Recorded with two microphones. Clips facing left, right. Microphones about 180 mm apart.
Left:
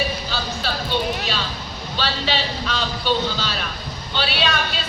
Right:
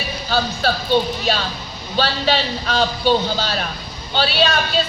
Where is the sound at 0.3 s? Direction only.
45° right (ahead or behind).